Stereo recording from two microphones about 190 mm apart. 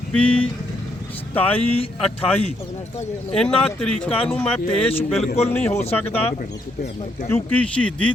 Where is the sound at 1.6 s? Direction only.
30° left (ahead or behind).